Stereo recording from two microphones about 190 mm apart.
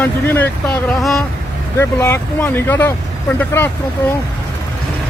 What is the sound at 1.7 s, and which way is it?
Speech, 10° left (ahead or behind).